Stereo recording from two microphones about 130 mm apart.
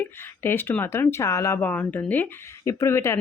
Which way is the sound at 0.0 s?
15° left (ahead or behind).